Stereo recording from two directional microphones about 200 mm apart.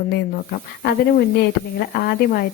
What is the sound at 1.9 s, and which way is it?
Speech, 50° left (ahead or behind).